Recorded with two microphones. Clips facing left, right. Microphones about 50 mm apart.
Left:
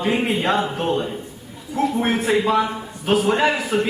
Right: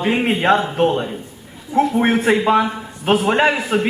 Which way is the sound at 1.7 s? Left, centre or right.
Right.